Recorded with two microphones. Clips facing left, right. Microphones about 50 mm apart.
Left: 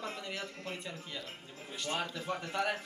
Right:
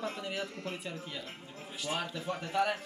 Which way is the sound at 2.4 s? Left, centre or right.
Centre.